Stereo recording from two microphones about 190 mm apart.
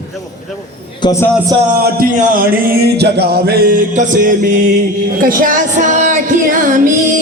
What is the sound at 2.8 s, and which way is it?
Music, 60° right (ahead or behind).